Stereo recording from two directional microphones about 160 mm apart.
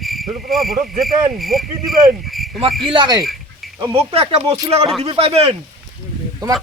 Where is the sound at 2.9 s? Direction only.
25° right (ahead or behind).